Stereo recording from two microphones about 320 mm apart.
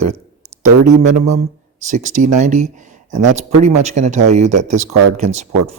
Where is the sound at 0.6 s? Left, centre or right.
Right.